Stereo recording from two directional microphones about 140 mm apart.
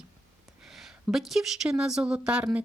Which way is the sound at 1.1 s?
Centre (ahead or behind).